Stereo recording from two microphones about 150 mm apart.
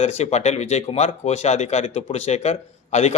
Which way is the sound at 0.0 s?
45° left (ahead or behind).